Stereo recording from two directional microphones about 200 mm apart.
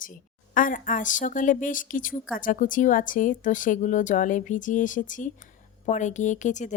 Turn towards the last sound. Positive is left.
turn(degrees=40)  # may be behind; listen again after turning